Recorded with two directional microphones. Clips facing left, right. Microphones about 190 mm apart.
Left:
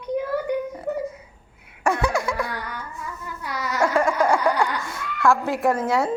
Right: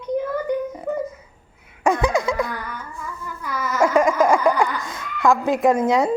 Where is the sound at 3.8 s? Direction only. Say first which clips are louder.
Right 4 dB; 15° right (ahead or behind).